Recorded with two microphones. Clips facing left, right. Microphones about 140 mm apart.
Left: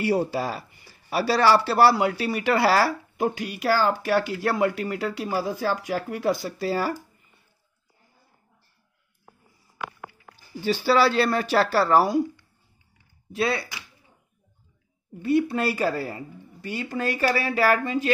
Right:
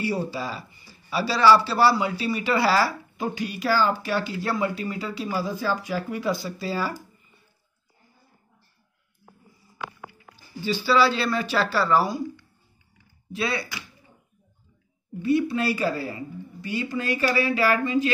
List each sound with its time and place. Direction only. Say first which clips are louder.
0.0 s speech: left 4 dB; 65° left (ahead or behind)
10.6 s speech: left 1 dB; 60° left (ahead or behind)
13.3 s speech: left 3 dB; 50° left (ahead or behind)
15.2 s speech: even; 55° left (ahead or behind)